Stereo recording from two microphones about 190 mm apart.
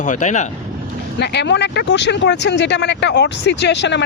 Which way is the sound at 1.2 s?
65° left (ahead or behind).